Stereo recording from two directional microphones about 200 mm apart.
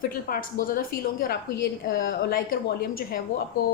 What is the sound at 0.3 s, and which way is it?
A woman's voice, 45° left (ahead or behind).